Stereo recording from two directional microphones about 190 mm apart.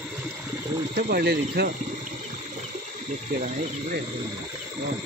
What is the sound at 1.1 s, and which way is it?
Speech, 55° right (ahead or behind).